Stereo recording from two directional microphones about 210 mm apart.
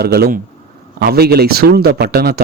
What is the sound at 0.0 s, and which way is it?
Speech, 50° right (ahead or behind).